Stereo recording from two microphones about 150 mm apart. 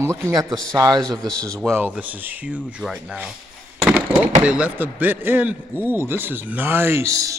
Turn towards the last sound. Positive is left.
turn(degrees=-20)  # may be behind; listen again after turning